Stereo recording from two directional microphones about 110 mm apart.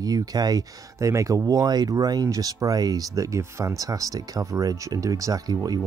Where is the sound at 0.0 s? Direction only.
35° right (ahead or behind).